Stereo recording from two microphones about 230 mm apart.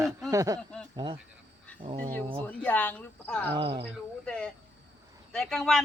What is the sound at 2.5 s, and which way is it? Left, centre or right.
Speech, centre.